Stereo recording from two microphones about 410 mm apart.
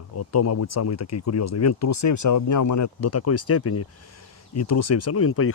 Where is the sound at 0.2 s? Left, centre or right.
Left.